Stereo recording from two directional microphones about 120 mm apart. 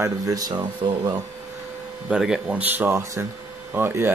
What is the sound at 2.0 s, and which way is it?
Speech, 5° right (ahead or behind).